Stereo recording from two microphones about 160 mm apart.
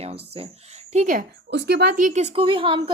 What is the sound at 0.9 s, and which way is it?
Speech, 55° right (ahead or behind).